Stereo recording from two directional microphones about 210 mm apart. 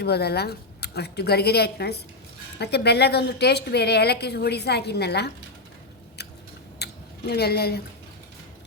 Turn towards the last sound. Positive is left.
turn(degrees=50)  # may be behind; listen again after turning